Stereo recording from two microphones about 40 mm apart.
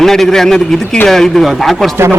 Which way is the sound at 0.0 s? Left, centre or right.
Centre.